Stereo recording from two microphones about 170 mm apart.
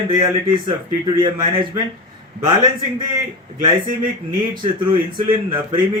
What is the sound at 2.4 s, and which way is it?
Speech, 25° right (ahead or behind).